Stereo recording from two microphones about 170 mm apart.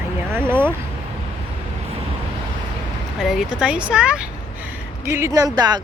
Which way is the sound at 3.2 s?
Centre (ahead or behind).